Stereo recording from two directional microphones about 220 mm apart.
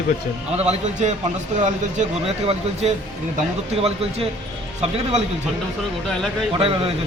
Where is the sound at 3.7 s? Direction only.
25° right (ahead or behind).